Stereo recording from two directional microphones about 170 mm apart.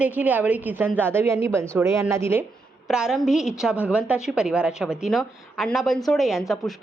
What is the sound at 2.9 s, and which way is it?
A woman's voice, 5° right (ahead or behind).